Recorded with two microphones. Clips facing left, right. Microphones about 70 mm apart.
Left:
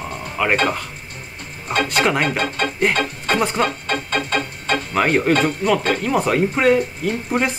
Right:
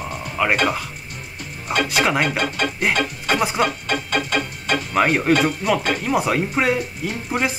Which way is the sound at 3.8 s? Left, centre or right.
Left.